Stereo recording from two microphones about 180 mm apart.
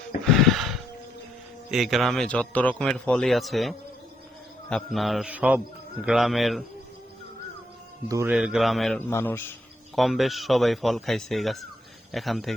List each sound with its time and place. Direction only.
0.3 s music: centre (ahead or behind)
1.7 s a man's voice: centre (ahead or behind)
8.0 s speech: 20° right (ahead or behind)
8.3 s a man's voice: 5° right (ahead or behind)
9.0 s a man's voice: 10° left (ahead or behind)
9.9 s a man's voice: centre (ahead or behind)